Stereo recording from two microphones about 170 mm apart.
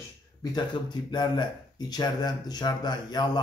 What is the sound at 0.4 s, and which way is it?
Speech, 25° left (ahead or behind).